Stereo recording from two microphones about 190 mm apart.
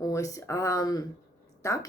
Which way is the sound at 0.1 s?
15° left (ahead or behind).